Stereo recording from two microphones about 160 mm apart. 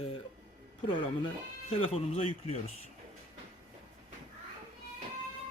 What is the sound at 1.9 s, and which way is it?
Speech, 40° left (ahead or behind).